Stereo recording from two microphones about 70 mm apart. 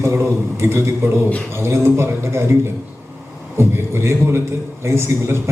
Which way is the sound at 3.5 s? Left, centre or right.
Right.